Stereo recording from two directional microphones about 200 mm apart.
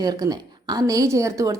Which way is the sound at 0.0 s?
20° right (ahead or behind).